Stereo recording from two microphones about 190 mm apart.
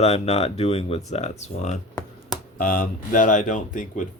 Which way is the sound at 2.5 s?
50° left (ahead or behind).